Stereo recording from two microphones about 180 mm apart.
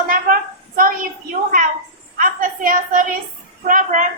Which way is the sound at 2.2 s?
50° right (ahead or behind).